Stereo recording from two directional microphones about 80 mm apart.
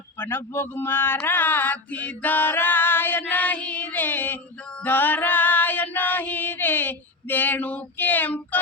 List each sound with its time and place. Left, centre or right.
0.2 s speech: left
4.8 s female singing: left